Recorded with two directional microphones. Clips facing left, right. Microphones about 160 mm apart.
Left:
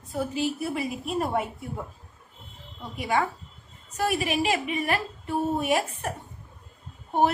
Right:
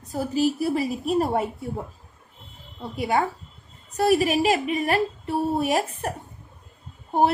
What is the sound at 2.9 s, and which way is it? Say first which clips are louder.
A woman's voice: right 3 dB; 35° right (ahead or behind).